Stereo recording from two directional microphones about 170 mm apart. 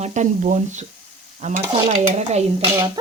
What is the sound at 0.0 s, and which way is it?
Speech, 45° right (ahead or behind).